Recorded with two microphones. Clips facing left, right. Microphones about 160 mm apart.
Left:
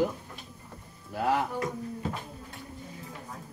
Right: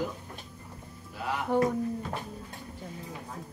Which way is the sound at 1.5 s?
70° right (ahead or behind).